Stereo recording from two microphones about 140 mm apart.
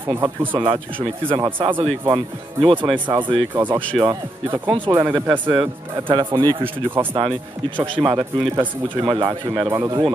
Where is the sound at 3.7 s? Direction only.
10° left (ahead or behind).